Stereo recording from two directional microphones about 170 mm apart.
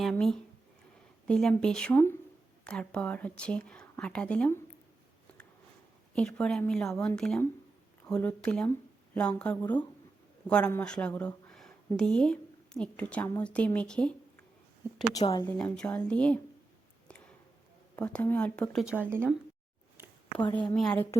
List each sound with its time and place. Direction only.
0.0 s speech: 5° left (ahead or behind)
6.1 s a woman's voice: 5° left (ahead or behind)
15.1 s speech: 20° left (ahead or behind)
15.4 s speech: 5° left (ahead or behind)
17.9 s speech: 10° left (ahead or behind)
20.0 s a sound: 15° right (ahead or behind)
20.7 s speech: 5° left (ahead or behind)